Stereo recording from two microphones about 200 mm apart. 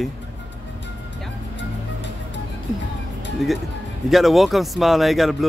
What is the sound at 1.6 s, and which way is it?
Music, 65° left (ahead or behind).